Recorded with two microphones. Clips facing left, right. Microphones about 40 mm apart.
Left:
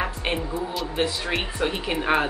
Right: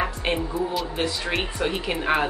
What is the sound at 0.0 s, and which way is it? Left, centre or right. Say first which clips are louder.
Speech: right 1 dB; centre.